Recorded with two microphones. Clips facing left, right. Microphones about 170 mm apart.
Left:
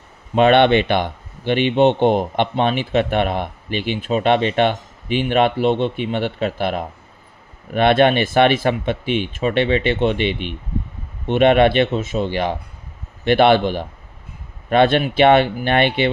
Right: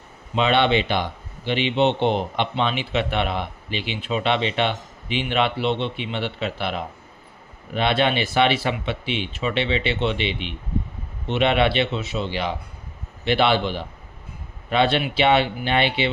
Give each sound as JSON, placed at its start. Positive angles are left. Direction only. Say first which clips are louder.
{"t": 0.3, "sound": "speech", "louder": "left 6 dB", "side_deg": 55}